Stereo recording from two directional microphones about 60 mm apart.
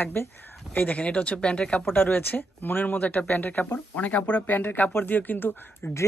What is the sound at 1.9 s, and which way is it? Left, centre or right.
Speech, left.